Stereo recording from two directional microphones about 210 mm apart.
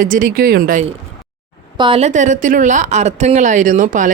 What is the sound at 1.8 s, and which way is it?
A woman's voice, 25° right (ahead or behind).